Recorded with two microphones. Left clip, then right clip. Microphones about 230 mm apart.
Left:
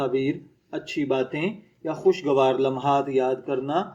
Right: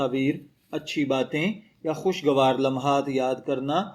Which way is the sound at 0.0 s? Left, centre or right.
Right.